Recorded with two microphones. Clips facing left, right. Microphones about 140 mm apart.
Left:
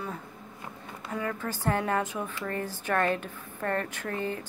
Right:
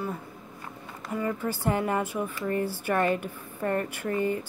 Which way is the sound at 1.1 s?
10° right (ahead or behind).